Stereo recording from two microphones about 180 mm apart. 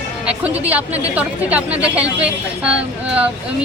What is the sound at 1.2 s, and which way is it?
A woman's voice, 10° right (ahead or behind).